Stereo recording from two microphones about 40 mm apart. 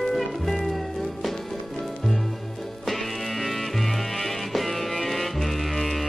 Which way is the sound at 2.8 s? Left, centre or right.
Centre.